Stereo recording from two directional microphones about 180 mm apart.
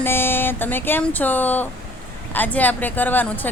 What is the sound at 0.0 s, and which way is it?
Speech, 10° left (ahead or behind).